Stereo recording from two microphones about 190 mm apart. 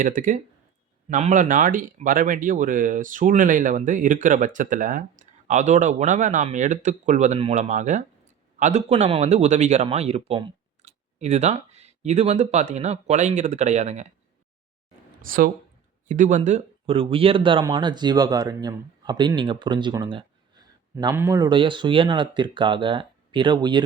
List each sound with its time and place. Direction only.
0.0 s speech: 45° right (ahead or behind)
15.2 s speech: 45° right (ahead or behind); by 23.8 s 25° right (ahead or behind)